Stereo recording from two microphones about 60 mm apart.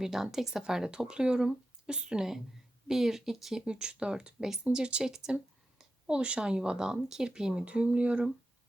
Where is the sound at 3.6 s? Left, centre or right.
Centre.